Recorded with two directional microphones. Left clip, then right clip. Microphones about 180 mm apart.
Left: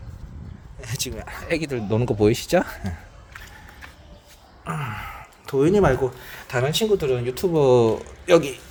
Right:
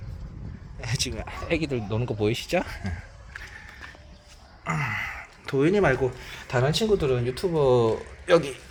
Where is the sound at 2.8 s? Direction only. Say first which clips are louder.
Left 2 dB; 20° left (ahead or behind).